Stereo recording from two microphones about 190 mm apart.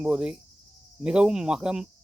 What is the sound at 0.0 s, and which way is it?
Speech, 5° right (ahead or behind).